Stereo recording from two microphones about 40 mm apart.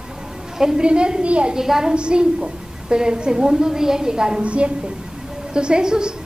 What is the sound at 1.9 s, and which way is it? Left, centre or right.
A woman's voice, right.